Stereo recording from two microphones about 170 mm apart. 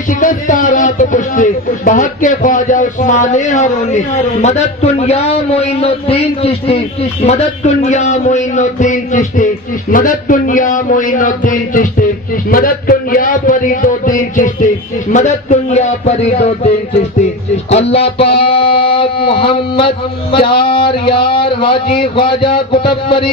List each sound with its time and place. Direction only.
0.2 s a man's voice: 50° left (ahead or behind); by 23.3 s 30° left (ahead or behind)